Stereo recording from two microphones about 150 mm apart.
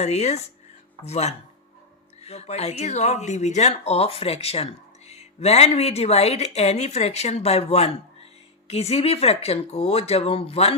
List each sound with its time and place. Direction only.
0.0 s speech: 45° left (ahead or behind)